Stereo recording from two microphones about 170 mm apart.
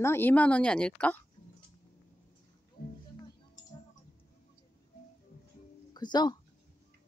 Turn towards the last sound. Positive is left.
turn(degrees=25)  # may be behind; listen again after turning